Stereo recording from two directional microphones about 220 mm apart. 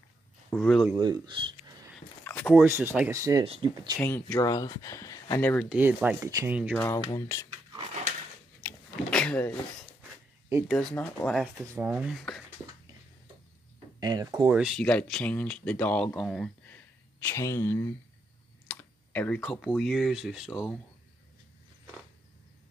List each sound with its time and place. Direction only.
0.5 s speech: 5° left (ahead or behind)
0.9 s speech: 20° right (ahead or behind)
2.4 s speech: 5° right (ahead or behind)
3.4 s speech: 25° right (ahead or behind)
4.0 s speech: 10° left (ahead or behind)
5.7 s speech: 5° right (ahead or behind)
6.8 s speech: 15° left (ahead or behind)
7.7 s a sound: 30° right (ahead or behind)
8.6 s a sound: 5° left (ahead or behind)
10.7 s speech: centre (ahead or behind)
11.5 s speech: 10° right (ahead or behind)
11.9 s speech: centre (ahead or behind)
13.9 s speech: 15° right (ahead or behind)
14.5 s speech: 5° right (ahead or behind)